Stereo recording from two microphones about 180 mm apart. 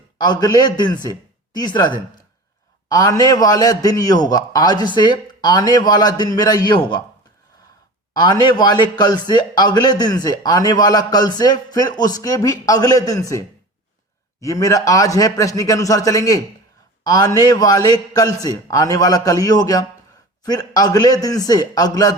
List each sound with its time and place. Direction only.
0.2 s a man's voice: 25° left (ahead or behind)
2.9 s a man's voice: 20° left (ahead or behind)
8.1 s a man's voice: 25° left (ahead or behind)
14.4 s a man's voice: 20° left (ahead or behind)